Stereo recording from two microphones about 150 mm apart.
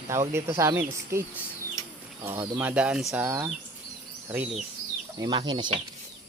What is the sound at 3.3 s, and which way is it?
Speech, 20° right (ahead or behind).